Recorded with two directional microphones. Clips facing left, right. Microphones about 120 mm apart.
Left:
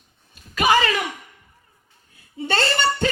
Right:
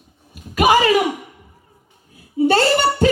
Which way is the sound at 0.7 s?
20° right (ahead or behind).